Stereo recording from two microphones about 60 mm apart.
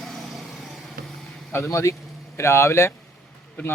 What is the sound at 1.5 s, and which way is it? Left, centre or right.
A man's voice, left.